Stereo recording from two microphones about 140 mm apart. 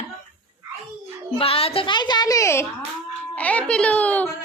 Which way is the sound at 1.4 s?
45° left (ahead or behind).